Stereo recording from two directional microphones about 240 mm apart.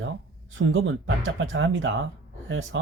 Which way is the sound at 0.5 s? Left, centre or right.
Right.